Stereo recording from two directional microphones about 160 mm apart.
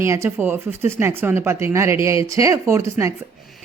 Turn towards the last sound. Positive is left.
turn(degrees=-20)  # may be behind; listen again after turning